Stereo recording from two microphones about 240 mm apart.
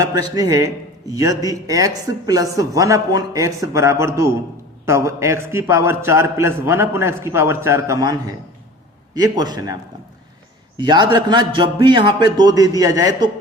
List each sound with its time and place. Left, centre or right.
0.0 s speech: centre
9.1 s speech: centre
10.8 s speech: centre